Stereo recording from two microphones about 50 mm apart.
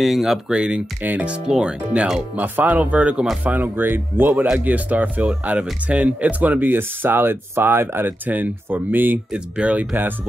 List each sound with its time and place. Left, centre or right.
0.0 s speech: centre
0.5 s speech: centre
2.3 s speech: right
3.4 s speech: right
4.6 s speech: right
8.3 s speech: right
9.3 s speech: right